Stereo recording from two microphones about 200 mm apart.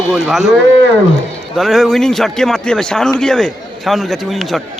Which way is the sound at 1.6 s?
Centre (ahead or behind).